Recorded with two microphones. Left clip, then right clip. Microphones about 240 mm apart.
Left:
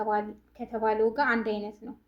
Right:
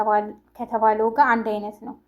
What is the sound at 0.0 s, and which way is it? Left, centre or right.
Speech, centre.